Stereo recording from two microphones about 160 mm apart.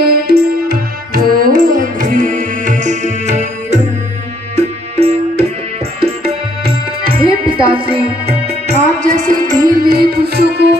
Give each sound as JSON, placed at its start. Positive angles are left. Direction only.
{"t": 0.0, "sound": "music", "side_deg": -70}
{"t": 7.2, "sound": "music", "side_deg": -35}
{"t": 8.7, "sound": "music", "side_deg": -50}